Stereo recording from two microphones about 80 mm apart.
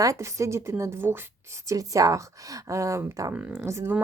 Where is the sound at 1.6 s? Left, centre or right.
Right.